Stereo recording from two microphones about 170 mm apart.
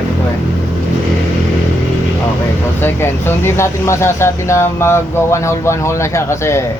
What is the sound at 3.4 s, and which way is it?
Speech, 15° left (ahead or behind).